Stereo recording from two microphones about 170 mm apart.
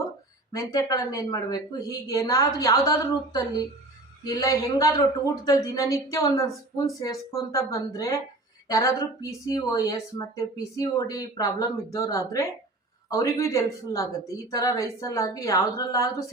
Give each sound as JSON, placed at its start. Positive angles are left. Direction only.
{"t": 0.5, "sound": "a woman's voice", "side_deg": 20}